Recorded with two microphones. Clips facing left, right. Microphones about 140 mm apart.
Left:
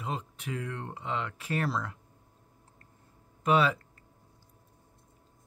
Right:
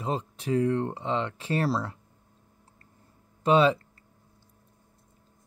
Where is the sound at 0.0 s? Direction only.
30° right (ahead or behind).